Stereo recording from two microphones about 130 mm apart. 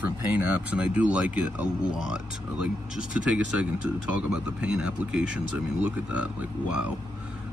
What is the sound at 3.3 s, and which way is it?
Speech, 10° right (ahead or behind).